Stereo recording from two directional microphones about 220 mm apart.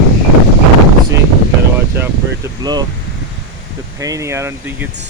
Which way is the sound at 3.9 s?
15° right (ahead or behind).